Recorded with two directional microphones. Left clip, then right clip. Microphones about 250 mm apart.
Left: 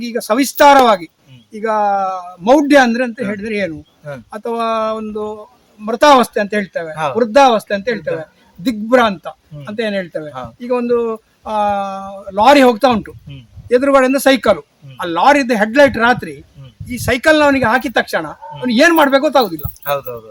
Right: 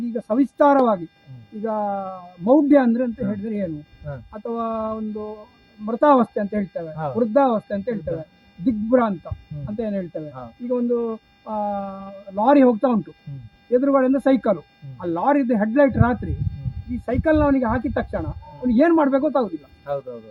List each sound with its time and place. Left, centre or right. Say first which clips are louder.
0.3 s speech: left 8 dB; centre
6.9 s speech: left 8 dB; centre
11.9 s speech: left 10 dB; left
12.4 s speech: left 7 dB; centre